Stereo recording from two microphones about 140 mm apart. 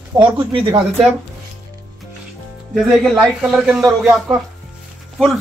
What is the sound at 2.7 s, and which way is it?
Speech, centre (ahead or behind).